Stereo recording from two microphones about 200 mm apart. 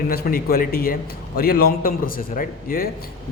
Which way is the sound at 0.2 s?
50° left (ahead or behind).